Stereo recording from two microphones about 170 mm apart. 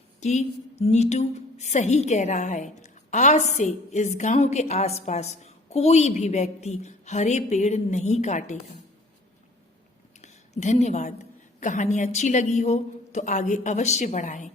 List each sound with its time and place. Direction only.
0.2 s a woman's voice: 40° left (ahead or behind)
10.2 s a sound: 40° left (ahead or behind)
11.6 s a woman's voice: 45° left (ahead or behind)